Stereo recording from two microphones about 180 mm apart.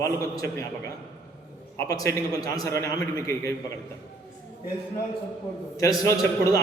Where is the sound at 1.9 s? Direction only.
20° left (ahead or behind).